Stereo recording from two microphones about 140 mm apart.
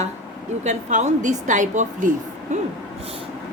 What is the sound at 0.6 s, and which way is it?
A woman's voice, 60° right (ahead or behind).